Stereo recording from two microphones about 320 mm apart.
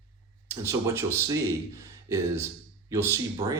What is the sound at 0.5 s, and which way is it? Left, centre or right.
Speech, centre.